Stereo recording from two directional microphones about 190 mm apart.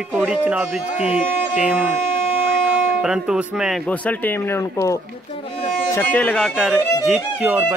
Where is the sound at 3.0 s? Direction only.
5° right (ahead or behind).